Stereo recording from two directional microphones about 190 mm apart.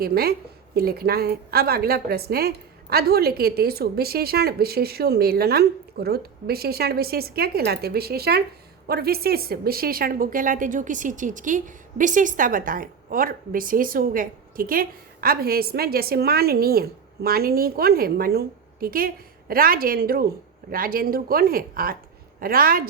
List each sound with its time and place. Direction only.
0.0 s a woman's voice: 55° right (ahead or behind)